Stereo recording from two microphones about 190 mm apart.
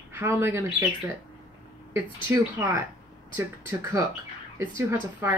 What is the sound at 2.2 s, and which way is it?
Speech, 15° right (ahead or behind).